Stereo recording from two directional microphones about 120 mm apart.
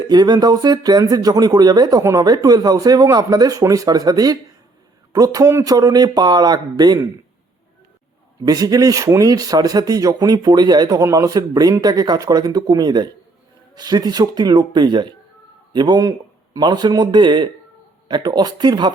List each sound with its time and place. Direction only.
0.1 s speech: 35° right (ahead or behind)
8.4 s speech: 30° right (ahead or behind)